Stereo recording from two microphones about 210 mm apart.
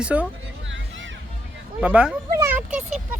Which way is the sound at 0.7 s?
60° right (ahead or behind).